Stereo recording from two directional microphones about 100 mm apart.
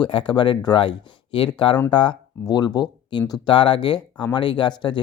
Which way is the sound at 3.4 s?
55° left (ahead or behind).